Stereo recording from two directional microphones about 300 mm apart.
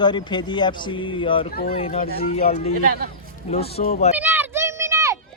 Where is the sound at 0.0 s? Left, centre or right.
Centre.